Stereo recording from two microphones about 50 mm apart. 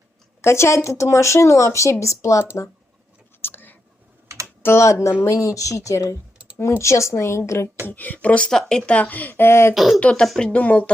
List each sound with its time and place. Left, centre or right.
0.4 s speech: left
3.4 s whispering: left
4.6 s a woman's voice: left
5.2 s a woman's voice: left
7.9 s speech: left
9.4 s speech: left
9.7 s speech: centre
10.0 s speech: left